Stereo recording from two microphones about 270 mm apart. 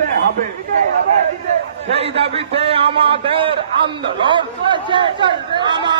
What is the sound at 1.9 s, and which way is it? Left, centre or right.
A man's voice, right.